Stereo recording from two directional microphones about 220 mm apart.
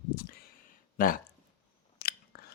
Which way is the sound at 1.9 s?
45° left (ahead or behind).